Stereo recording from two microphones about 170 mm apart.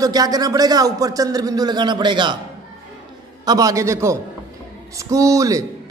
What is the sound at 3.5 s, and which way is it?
A man's voice, 20° right (ahead or behind).